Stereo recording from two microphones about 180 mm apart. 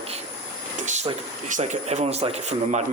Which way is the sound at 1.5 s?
45° right (ahead or behind).